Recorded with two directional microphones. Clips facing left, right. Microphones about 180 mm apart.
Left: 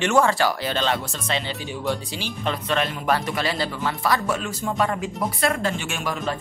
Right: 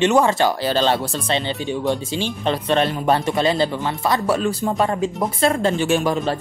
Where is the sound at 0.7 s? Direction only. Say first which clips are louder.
Right 6 dB; 35° right (ahead or behind).